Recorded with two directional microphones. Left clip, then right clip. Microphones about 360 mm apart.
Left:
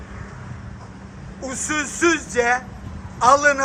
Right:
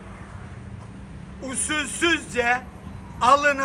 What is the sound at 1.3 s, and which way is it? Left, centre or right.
A man's voice, centre.